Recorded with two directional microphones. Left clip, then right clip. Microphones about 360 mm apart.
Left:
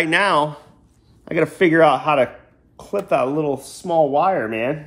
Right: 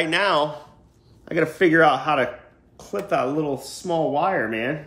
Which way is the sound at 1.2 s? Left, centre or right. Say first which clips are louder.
Left 3 dB; centre.